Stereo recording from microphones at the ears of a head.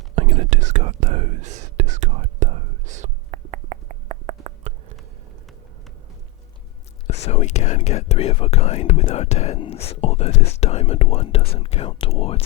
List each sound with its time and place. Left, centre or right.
0.2 s whispering: right
7.1 s speech: left